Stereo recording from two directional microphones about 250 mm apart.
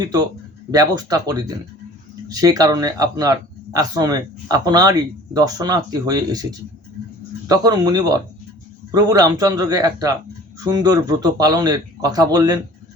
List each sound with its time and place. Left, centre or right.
0.0 s speech: centre